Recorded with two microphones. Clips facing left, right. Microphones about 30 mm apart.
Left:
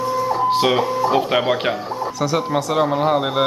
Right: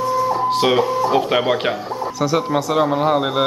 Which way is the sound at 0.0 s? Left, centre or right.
Centre.